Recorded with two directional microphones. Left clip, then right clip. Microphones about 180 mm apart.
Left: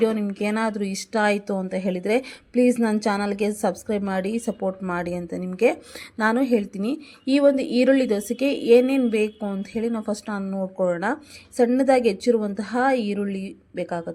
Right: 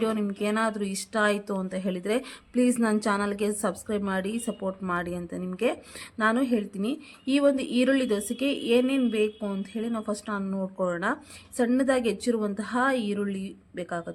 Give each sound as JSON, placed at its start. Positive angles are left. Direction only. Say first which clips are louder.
{"t": 0.0, "sound": "a woman's voice", "louder": "left 5 dB", "side_deg": 10}